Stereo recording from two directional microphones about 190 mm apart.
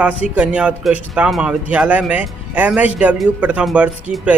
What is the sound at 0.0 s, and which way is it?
Speech, 5° right (ahead or behind).